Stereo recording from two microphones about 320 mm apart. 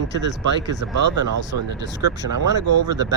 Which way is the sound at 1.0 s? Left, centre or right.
Right.